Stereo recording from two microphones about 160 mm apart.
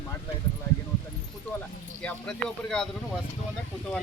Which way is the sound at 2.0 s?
5° left (ahead or behind).